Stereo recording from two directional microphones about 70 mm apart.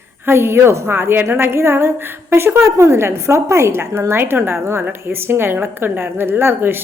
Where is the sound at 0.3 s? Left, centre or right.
Right.